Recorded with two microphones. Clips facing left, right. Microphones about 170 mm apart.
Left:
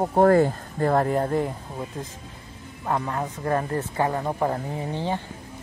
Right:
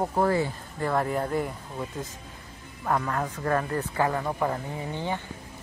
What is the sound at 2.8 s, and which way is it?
Speech, 25° left (ahead or behind).